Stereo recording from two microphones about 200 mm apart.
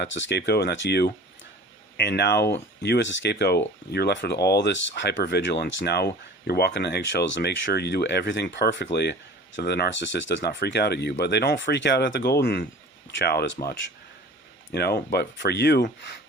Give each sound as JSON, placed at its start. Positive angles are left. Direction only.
{"t": 0.0, "sound": "speech", "side_deg": 60}